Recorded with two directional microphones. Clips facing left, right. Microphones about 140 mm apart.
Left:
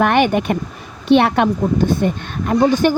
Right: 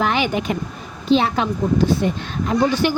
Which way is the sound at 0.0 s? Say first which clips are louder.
Left 5 dB; 55° left (ahead or behind).